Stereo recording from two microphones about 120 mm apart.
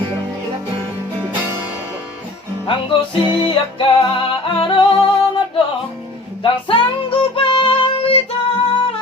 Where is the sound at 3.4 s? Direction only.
45° left (ahead or behind).